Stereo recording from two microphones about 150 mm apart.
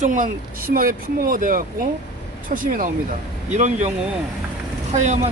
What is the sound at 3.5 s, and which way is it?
Speech, 50° right (ahead or behind).